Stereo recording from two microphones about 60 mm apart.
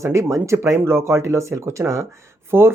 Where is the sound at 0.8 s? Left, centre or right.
Right.